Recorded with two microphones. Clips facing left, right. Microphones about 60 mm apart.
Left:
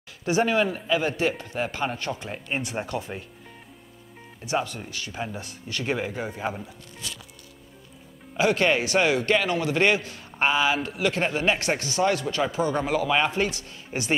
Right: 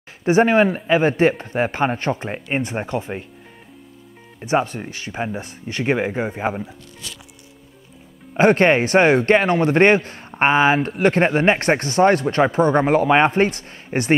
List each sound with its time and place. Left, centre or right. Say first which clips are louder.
0.2 s a man's voice: right 8 dB; right
4.4 s a man's voice: right 7 dB; right
8.4 s a man's voice: right 7 dB; right